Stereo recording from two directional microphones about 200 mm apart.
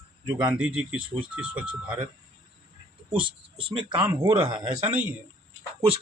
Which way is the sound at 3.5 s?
25° right (ahead or behind).